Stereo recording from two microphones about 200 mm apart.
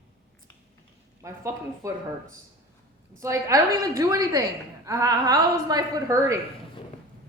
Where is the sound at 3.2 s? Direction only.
15° right (ahead or behind).